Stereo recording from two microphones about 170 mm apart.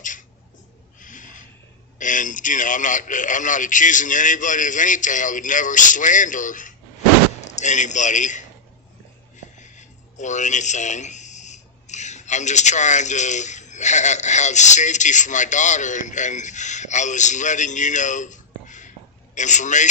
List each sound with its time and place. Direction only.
0.0 s a sound: 50° left (ahead or behind)
2.0 s a man's voice: 50° left (ahead or behind)
9.6 s speech: 45° left (ahead or behind)